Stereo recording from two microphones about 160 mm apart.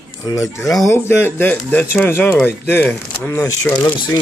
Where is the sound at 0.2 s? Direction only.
20° left (ahead or behind).